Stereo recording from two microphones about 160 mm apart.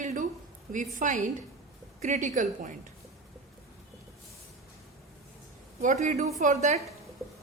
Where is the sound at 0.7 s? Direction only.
50° right (ahead or behind).